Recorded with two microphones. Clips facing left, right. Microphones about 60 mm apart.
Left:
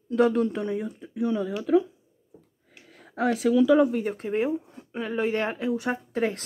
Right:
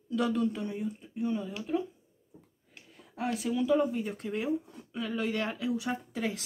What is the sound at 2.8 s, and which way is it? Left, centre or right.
Speech, left.